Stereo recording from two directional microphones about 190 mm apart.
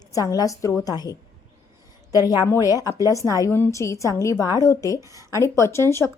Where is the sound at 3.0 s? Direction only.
15° left (ahead or behind).